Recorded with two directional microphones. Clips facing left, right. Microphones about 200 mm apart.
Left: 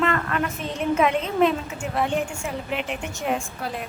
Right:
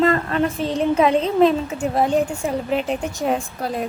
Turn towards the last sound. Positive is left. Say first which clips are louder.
# right 4 dB
turn(degrees=-35)  # may be behind; listen again after turning